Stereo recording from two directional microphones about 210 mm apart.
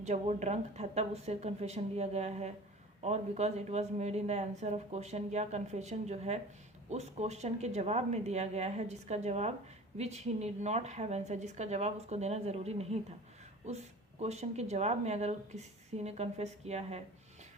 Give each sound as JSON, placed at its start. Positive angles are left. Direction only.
{"t": 0.0, "sound": "speech", "side_deg": -35}